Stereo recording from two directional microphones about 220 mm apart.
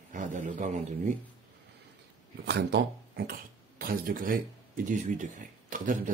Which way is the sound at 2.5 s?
50° right (ahead or behind).